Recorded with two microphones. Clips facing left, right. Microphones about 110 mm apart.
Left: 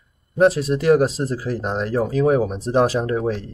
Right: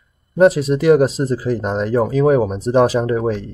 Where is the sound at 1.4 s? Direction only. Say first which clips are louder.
Right 4 dB; 90° right.